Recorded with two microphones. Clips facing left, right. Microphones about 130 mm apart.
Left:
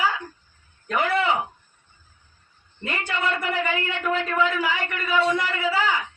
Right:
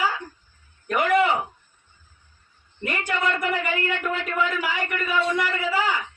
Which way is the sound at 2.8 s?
15° right (ahead or behind).